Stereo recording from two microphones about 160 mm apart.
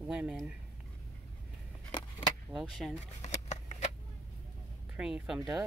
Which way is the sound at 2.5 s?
Centre (ahead or behind).